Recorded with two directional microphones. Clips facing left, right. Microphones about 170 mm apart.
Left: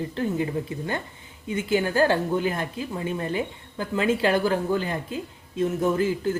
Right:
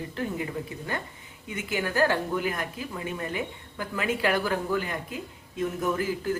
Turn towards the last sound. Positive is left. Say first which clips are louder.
# left 4 dB
turn(degrees=25)  # may be behind; listen again after turning